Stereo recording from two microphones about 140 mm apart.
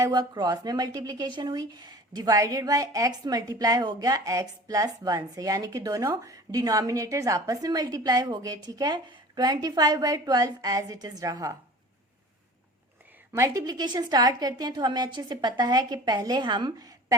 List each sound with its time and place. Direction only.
0.0 s a woman's voice: 30° right (ahead or behind)
13.3 s a woman's voice: 20° right (ahead or behind)